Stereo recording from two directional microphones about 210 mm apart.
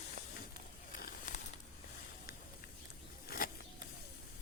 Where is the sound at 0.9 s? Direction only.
40° left (ahead or behind).